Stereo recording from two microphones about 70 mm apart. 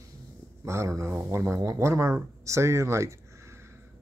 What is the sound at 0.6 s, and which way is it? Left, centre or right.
Speech, right.